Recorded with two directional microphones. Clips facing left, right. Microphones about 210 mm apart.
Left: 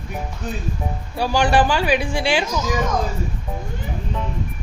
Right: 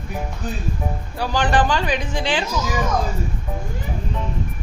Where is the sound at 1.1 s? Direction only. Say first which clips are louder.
Left 3 dB; 10° left (ahead or behind).